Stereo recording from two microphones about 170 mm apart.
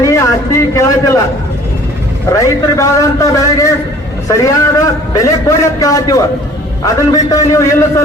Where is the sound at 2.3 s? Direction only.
20° left (ahead or behind).